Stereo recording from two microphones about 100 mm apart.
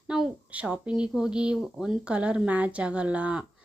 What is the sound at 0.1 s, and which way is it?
Speech, 10° right (ahead or behind).